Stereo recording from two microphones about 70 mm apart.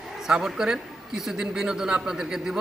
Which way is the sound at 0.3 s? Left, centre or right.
Centre.